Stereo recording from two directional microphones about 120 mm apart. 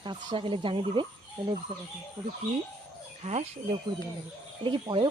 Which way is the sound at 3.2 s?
65° right (ahead or behind).